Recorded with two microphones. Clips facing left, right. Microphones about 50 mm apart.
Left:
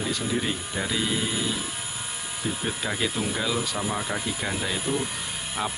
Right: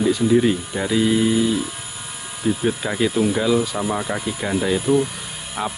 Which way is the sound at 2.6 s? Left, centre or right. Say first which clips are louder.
Right 6 dB; centre.